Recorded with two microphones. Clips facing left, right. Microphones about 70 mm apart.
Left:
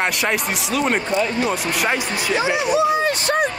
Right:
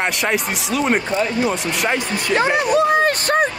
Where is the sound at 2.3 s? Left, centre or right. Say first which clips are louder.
Right 3 dB; right.